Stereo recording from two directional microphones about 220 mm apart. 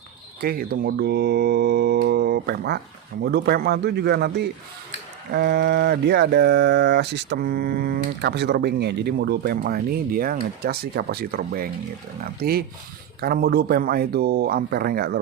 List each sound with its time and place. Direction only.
0.4 s speech: 45° right (ahead or behind)